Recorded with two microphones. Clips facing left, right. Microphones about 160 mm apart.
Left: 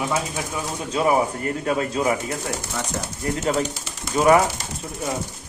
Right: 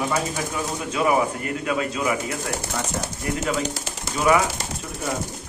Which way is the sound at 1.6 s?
35° left (ahead or behind).